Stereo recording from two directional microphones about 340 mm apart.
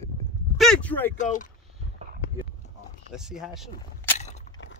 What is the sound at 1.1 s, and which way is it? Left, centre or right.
Speech, left.